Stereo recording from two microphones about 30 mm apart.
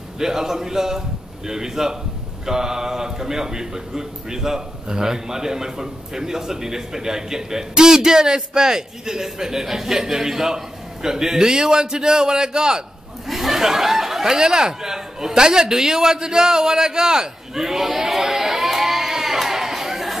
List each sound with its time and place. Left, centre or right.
0.2 s a man's voice: centre
13.3 s a sound: centre
13.6 s a man's voice: centre